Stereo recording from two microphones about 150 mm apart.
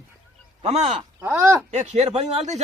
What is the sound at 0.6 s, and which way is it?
Speech, 45° right (ahead or behind).